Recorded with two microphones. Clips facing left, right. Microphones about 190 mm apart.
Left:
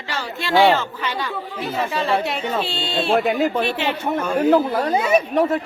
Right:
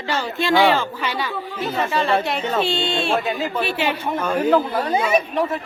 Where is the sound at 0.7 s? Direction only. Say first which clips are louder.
Right 1 dB; 10° right (ahead or behind).